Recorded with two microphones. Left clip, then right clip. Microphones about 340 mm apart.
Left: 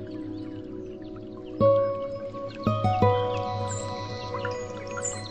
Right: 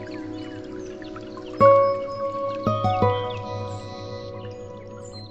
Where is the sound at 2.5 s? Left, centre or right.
Centre.